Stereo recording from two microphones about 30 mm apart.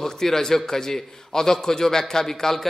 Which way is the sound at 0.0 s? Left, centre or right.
Centre.